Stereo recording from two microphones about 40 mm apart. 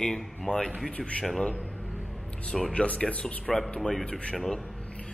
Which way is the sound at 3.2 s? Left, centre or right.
Centre.